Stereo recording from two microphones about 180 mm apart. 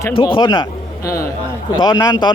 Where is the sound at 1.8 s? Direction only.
25° left (ahead or behind).